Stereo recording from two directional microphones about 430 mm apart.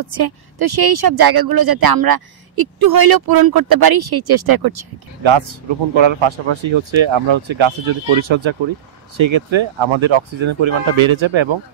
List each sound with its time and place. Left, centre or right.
0.1 s speech: right
5.2 s speech: right